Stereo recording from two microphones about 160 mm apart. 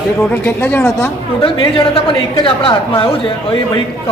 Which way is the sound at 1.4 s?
35° left (ahead or behind).